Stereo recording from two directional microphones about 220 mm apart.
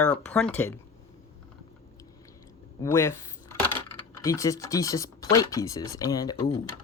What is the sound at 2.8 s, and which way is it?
Speech, 10° left (ahead or behind).